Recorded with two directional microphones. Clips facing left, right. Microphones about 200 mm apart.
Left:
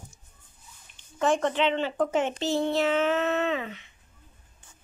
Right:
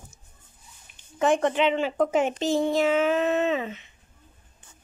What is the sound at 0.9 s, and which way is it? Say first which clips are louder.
A woman's voice: right 2 dB; 15° right (ahead or behind).